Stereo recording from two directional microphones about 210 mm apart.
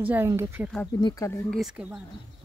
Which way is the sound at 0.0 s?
10° right (ahead or behind).